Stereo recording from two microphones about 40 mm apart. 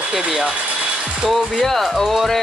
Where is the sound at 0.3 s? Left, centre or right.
Centre.